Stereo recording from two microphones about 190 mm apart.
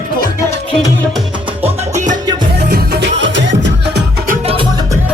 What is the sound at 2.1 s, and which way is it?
Music, 20° right (ahead or behind).